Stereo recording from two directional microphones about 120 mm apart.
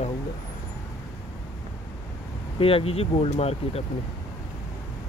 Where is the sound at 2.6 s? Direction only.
50° left (ahead or behind).